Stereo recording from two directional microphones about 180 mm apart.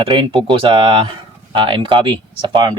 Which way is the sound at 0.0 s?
30° right (ahead or behind).